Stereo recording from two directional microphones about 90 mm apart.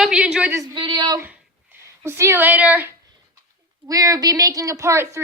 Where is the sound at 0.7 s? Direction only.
55° right (ahead or behind).